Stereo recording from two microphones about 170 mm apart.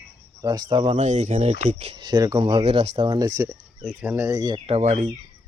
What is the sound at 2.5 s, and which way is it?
Speech, 35° right (ahead or behind).